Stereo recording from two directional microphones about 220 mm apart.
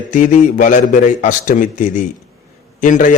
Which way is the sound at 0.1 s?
35° left (ahead or behind).